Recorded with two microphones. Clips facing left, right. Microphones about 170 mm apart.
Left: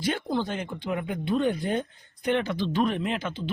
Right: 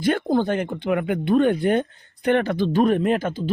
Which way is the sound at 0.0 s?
55° right (ahead or behind).